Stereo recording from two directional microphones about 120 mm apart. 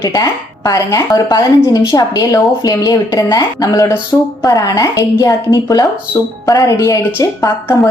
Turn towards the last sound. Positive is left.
turn(degrees=20)  # may be behind; listen again after turning